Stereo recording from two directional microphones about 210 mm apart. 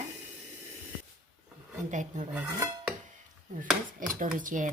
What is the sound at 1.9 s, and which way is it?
Speech, 35° right (ahead or behind).